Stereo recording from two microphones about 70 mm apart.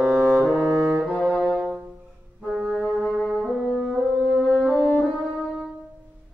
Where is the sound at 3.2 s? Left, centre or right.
Centre.